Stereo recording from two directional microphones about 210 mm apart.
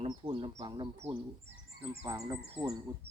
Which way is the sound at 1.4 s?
30° right (ahead or behind).